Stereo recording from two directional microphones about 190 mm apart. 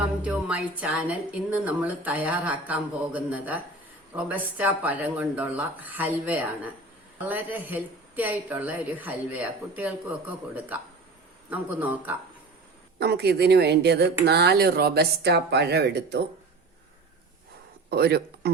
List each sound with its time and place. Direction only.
0.2 s a woman's voice: 5° right (ahead or behind)
13.0 s speech: 60° right (ahead or behind)
17.9 s speech: 55° right (ahead or behind)